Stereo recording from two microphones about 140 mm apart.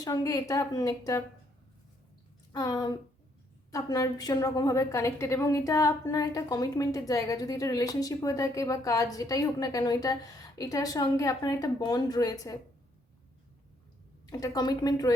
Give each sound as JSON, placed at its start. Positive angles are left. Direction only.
{"t": 0.0, "sound": "a woman's voice", "side_deg": 25}
{"t": 2.5, "sound": "a woman's voice", "side_deg": 30}
{"t": 14.3, "sound": "a woman's voice", "side_deg": 25}